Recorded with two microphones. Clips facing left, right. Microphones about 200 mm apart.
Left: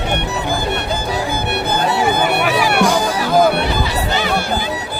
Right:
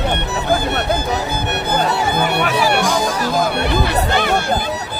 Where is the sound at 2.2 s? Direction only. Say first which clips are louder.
Left 1 dB; 10° left (ahead or behind).